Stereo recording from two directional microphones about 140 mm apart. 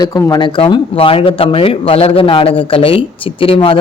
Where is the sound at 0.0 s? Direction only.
25° left (ahead or behind).